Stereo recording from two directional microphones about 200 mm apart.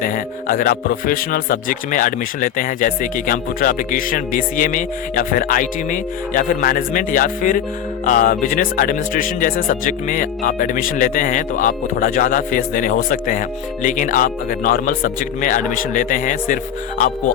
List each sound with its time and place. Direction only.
0.0 s speech: 45° left (ahead or behind)